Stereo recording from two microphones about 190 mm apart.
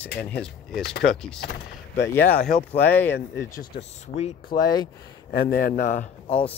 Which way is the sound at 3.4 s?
40° left (ahead or behind).